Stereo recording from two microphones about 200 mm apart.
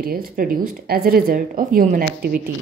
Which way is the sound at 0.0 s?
45° right (ahead or behind).